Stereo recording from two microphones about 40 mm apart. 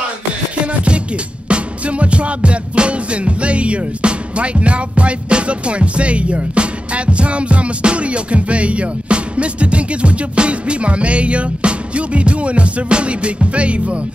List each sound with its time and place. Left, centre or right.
1.5 s music: right